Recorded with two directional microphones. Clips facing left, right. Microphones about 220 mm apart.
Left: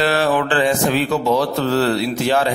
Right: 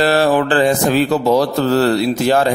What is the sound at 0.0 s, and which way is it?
Mantra, 40° right (ahead or behind).